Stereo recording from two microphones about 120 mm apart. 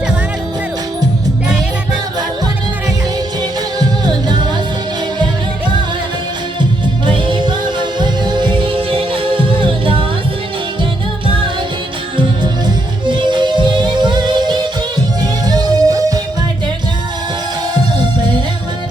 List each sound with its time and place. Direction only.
3.8 s music: 35° right (ahead or behind)
6.6 s music: 40° right (ahead or behind)
12.1 s music: 40° right (ahead or behind)